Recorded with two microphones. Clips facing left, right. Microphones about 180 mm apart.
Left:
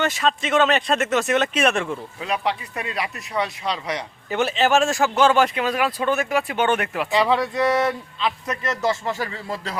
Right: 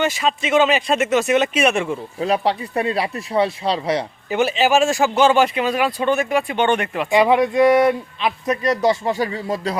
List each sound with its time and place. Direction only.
0.0 s speech: 5° right (ahead or behind)
2.1 s speech: 35° right (ahead or behind)
4.3 s speech: 5° right (ahead or behind)
7.1 s a man's voice: 15° right (ahead or behind)